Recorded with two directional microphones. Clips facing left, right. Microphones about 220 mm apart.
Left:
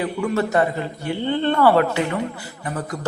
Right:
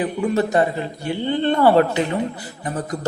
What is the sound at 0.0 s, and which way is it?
A man's voice, 20° right (ahead or behind).